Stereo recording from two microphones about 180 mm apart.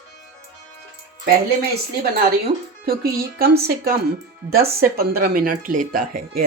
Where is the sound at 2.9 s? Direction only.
60° right (ahead or behind).